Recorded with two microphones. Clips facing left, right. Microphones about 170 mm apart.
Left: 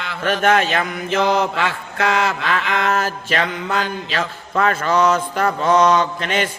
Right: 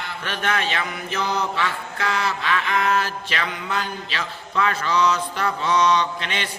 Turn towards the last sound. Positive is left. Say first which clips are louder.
# left 6 dB
turn(degrees=45)  # may be behind; listen again after turning